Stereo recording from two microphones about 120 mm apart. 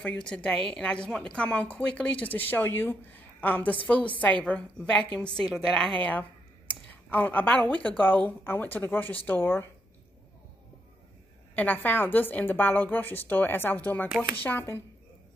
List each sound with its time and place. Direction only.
0.0 s speech: 10° left (ahead or behind)
11.5 s speech: 15° left (ahead or behind)